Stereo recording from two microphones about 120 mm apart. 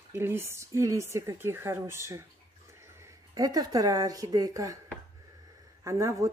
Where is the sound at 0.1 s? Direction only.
20° right (ahead or behind).